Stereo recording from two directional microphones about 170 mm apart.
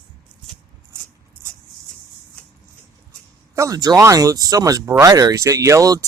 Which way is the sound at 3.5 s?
20° right (ahead or behind).